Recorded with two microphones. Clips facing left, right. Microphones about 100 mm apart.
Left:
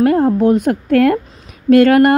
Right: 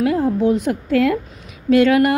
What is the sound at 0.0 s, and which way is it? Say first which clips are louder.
A woman's voice: left 5 dB; 50° left (ahead or behind).